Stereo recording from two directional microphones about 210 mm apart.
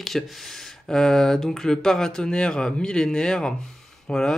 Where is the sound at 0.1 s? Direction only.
Centre (ahead or behind).